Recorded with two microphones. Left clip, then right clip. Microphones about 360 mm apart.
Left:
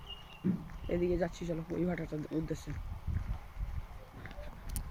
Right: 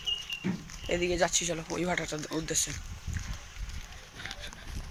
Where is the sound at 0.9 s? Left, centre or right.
Right.